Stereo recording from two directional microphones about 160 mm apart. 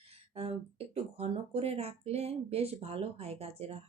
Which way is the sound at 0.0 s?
40° right (ahead or behind).